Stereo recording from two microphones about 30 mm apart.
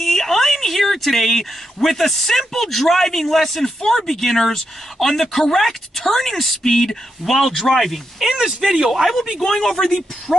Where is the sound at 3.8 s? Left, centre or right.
Centre.